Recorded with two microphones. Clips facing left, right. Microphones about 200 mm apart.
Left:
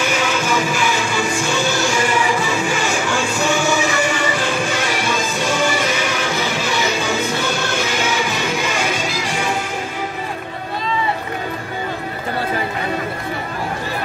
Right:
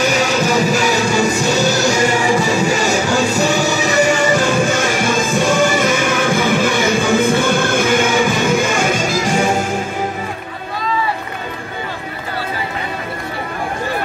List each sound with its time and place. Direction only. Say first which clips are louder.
0.0 s music: right 4 dB; 40° right (ahead or behind)